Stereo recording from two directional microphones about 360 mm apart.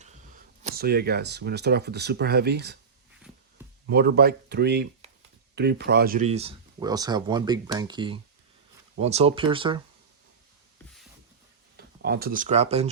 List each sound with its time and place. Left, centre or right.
0.0 s speech: right
3.8 s speech: right
12.0 s speech: right